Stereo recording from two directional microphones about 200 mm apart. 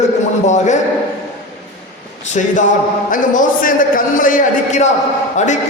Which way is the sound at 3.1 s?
40° left (ahead or behind).